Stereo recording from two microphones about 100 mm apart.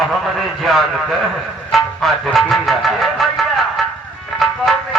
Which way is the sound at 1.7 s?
Centre (ahead or behind).